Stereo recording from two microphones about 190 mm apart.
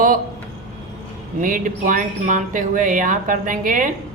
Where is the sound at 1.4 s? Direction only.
45° right (ahead or behind).